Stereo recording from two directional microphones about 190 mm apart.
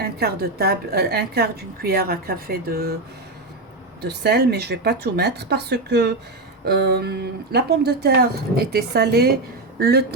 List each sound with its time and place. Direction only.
0.0 s a woman's voice: 55° right (ahead or behind)
4.0 s a woman's voice: 60° right (ahead or behind)